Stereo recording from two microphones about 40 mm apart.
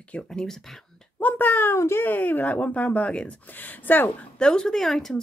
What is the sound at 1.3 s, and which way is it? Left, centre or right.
Speech, left.